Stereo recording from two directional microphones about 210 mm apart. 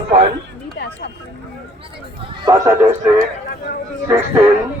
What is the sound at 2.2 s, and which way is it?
A man's voice, 20° right (ahead or behind).